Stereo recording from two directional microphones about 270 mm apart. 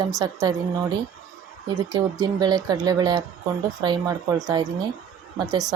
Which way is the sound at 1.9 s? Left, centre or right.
Centre.